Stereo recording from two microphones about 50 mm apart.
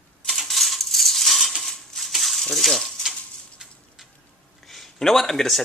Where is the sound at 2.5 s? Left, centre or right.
Centre.